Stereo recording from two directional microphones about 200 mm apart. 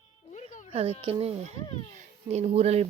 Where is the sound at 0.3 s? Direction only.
35° left (ahead or behind).